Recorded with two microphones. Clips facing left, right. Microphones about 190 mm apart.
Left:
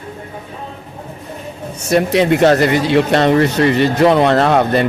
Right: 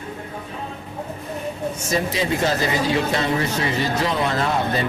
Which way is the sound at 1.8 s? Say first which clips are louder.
Left 11 dB; 70° left (ahead or behind).